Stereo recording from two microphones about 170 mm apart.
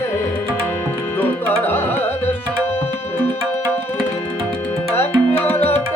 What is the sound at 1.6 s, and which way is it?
Music, 10° left (ahead or behind).